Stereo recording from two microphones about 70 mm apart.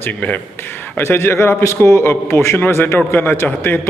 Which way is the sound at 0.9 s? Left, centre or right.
Left.